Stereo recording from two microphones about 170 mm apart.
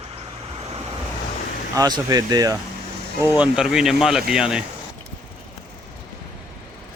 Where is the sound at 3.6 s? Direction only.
5° right (ahead or behind).